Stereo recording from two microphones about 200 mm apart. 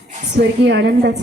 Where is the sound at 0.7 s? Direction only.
60° right (ahead or behind).